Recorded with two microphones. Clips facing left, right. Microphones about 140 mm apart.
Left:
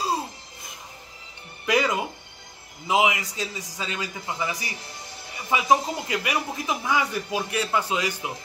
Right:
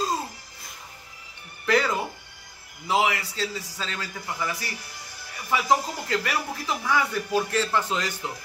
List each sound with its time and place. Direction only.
1.7 s music: 15° left (ahead or behind)
2.9 s a man's voice: 15° left (ahead or behind)